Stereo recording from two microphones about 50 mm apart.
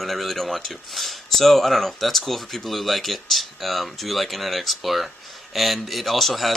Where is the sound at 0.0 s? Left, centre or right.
Centre.